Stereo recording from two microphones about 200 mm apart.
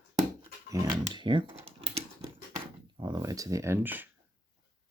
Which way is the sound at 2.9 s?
20° right (ahead or behind).